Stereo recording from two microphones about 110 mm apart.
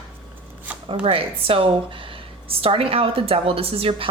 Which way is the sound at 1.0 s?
55° right (ahead or behind).